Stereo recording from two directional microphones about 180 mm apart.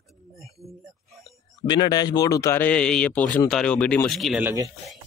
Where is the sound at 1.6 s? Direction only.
20° left (ahead or behind); by 4.4 s centre (ahead or behind).